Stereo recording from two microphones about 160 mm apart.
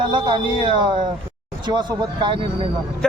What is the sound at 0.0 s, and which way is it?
Speech, 30° right (ahead or behind).